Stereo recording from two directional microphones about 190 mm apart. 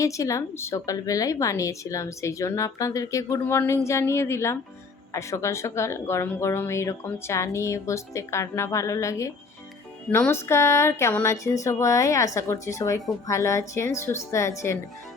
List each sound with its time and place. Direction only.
0.0 s speech: 15° left (ahead or behind)